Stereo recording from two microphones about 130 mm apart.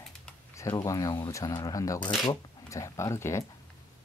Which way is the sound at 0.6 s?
25° left (ahead or behind).